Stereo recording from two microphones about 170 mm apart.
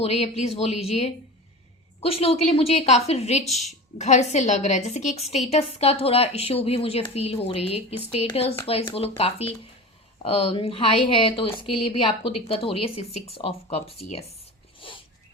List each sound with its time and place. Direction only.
0.0 s a woman's voice: 35° left (ahead or behind)
3.4 s a woman's voice: centre (ahead or behind)
3.9 s a woman's voice: 40° left (ahead or behind)
14.8 s a sound: 30° left (ahead or behind)